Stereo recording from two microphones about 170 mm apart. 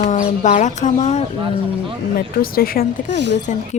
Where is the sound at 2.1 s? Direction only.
60° left (ahead or behind).